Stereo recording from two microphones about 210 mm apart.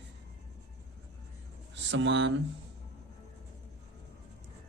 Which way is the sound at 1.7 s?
60° right (ahead or behind).